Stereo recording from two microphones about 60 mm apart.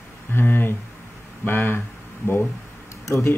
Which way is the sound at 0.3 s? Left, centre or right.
Left.